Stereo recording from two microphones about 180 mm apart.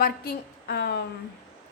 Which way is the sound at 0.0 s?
65° left (ahead or behind).